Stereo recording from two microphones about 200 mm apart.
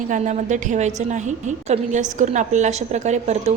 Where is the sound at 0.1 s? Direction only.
40° right (ahead or behind).